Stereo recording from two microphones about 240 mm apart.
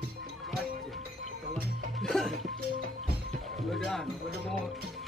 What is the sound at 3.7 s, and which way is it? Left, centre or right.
Music, centre.